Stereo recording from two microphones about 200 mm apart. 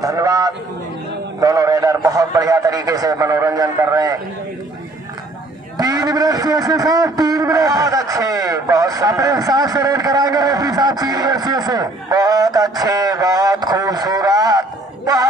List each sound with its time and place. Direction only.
0.0 s a man's voice: 15° right (ahead or behind)
5.8 s a man's voice: 20° right (ahead or behind)